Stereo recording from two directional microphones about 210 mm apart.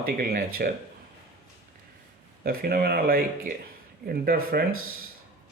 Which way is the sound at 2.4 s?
45° right (ahead or behind).